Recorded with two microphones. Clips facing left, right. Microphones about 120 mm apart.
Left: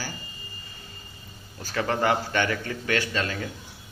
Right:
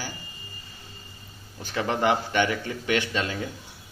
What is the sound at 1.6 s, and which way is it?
A man's voice, 20° right (ahead or behind).